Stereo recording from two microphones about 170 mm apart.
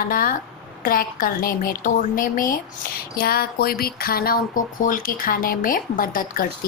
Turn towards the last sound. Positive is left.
turn(degrees=55)  # may be behind; listen again after turning